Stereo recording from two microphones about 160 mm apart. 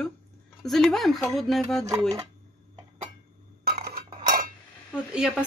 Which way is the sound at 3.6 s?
80° right.